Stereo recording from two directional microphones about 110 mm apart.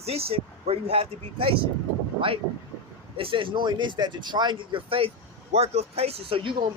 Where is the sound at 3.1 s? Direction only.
50° right (ahead or behind).